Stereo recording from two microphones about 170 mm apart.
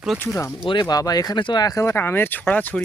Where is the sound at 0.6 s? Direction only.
25° left (ahead or behind).